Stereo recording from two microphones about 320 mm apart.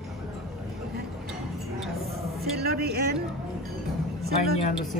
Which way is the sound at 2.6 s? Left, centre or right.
Right.